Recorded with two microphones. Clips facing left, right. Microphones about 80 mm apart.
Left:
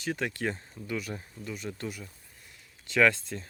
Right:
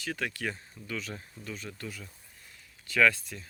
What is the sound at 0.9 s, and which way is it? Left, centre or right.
Speech, centre.